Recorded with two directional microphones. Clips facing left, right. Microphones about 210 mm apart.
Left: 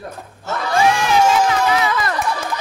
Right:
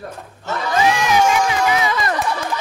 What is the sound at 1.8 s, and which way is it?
Run, 20° right (ahead or behind).